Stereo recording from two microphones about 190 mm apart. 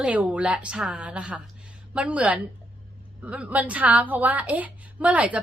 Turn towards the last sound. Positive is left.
turn(degrees=-5)  # may be behind; listen again after turning